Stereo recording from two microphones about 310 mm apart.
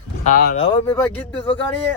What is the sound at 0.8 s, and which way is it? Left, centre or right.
Speech, centre.